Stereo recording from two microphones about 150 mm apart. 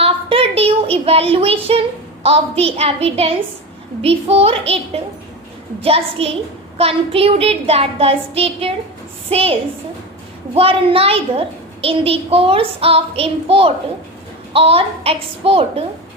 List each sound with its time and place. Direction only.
0.0 s a sound: 40° right (ahead or behind)
2.2 s a child's voice: 40° right (ahead or behind)
5.8 s a child's voice: 40° right (ahead or behind)